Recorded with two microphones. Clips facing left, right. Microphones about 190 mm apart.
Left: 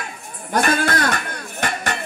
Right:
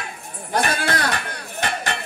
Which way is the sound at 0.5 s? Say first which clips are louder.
Left 3 dB; 45° left (ahead or behind).